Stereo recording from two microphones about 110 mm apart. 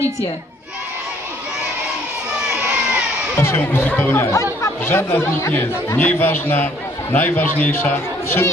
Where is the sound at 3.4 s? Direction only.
20° left (ahead or behind).